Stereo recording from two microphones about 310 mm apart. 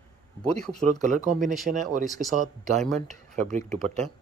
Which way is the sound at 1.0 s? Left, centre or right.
Right.